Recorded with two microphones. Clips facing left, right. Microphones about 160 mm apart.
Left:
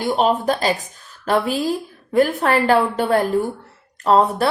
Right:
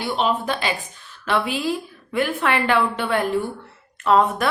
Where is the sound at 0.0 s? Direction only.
45° left (ahead or behind).